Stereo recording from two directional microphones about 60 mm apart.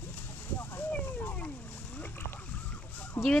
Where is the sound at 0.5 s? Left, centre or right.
Left.